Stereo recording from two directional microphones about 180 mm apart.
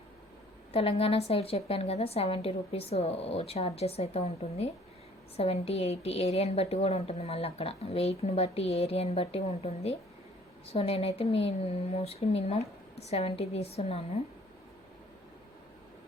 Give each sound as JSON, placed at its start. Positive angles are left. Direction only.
{"t": 0.7, "sound": "a woman's voice", "side_deg": 30}